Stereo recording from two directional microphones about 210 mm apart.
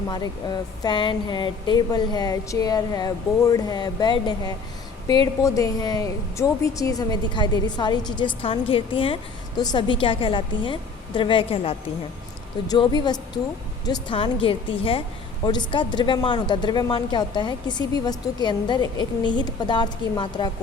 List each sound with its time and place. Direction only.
0.1 s a woman's voice: 20° left (ahead or behind)